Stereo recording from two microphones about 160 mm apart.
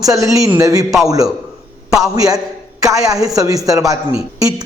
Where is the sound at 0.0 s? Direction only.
20° right (ahead or behind).